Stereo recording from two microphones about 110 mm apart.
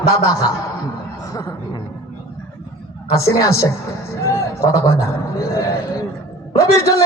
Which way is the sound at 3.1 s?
30° left (ahead or behind).